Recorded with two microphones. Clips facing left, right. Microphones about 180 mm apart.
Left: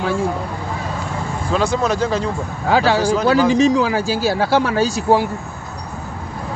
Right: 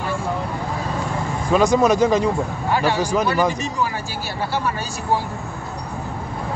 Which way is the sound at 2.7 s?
90° left.